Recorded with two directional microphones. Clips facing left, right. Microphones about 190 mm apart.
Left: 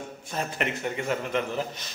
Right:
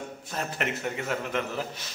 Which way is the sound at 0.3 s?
Centre (ahead or behind).